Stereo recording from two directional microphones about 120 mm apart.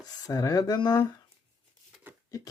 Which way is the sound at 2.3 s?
30° left (ahead or behind).